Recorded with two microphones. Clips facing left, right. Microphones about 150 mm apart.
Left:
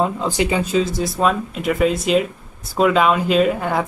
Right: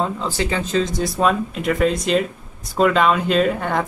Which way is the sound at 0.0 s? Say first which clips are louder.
Left 3 dB; 15° left (ahead or behind).